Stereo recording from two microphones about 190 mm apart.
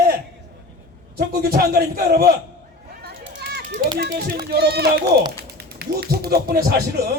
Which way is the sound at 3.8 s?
50° right (ahead or behind).